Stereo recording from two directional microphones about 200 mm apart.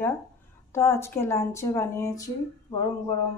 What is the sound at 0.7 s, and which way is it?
Speech, 10° left (ahead or behind).